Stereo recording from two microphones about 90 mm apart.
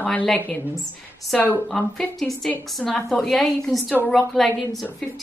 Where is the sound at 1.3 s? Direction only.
Centre (ahead or behind).